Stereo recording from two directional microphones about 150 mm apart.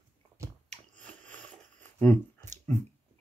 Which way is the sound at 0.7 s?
10° left (ahead or behind).